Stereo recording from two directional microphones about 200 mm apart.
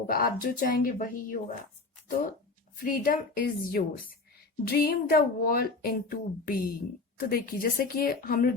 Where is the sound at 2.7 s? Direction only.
45° left (ahead or behind).